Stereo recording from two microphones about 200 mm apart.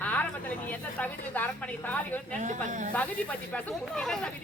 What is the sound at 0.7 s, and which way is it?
Speech, 10° left (ahead or behind).